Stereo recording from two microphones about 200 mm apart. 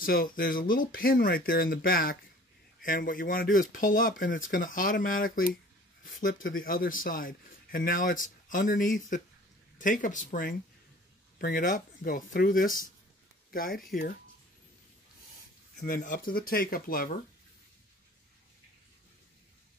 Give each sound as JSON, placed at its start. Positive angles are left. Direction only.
{"t": 0.0, "sound": "speech", "side_deg": 45}
{"t": 15.8, "sound": "speech", "side_deg": 45}